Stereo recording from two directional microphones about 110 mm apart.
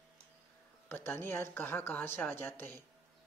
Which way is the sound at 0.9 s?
20° left (ahead or behind).